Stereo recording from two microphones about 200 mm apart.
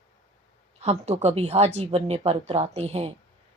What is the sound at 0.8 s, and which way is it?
Speech, 35° right (ahead or behind).